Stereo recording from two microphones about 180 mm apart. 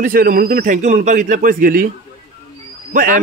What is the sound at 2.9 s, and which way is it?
Speech, 50° right (ahead or behind).